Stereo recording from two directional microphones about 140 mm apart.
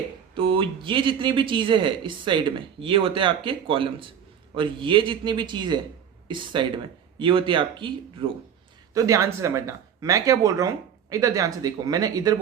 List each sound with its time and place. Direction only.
0.3 s speech: 35° right (ahead or behind)
8.9 s speech: 25° right (ahead or behind)